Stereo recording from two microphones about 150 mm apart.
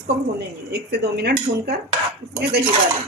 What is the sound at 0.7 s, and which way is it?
Speech, 90° right.